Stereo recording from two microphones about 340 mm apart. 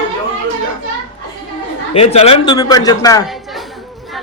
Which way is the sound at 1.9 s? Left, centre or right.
Centre.